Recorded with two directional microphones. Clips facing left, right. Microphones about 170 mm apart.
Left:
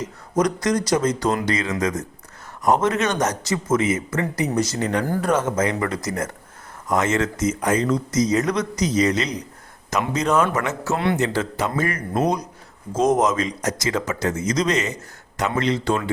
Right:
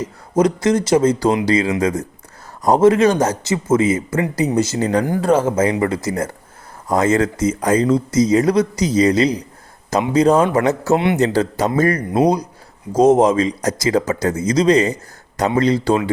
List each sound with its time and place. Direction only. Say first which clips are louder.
0.3 s speech: right 5 dB; 25° right (ahead or behind)
10.9 s speech: right 4 dB; 20° right (ahead or behind)
11.3 s speech: right 6 dB; 40° right (ahead or behind)